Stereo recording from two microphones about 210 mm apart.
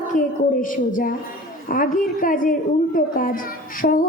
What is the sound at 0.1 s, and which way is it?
A child's voice, 40° left (ahead or behind).